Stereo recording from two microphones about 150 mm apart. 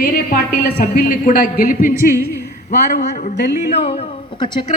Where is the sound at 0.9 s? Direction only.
70° left (ahead or behind).